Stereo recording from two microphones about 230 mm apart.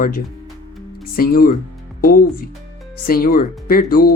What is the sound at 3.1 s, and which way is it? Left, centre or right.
Speech, left.